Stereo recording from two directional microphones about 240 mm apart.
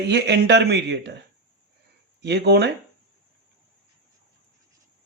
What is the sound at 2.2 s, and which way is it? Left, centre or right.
Speech, right.